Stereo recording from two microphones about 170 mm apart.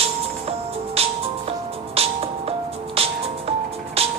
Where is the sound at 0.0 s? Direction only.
35° right (ahead or behind).